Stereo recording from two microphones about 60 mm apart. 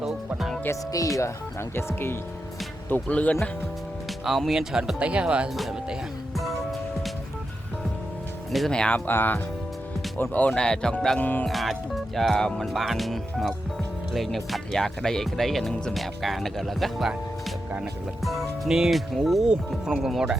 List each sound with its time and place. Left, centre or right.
0.9 s speech: left
1.7 s speech: left
2.9 s speech: left
4.2 s speech: centre
8.5 s speech: centre
8.9 s speech: left
10.5 s speech: centre
11.2 s speech: left
11.4 s speech: centre
18.2 s speech: centre
19.5 s speech: centre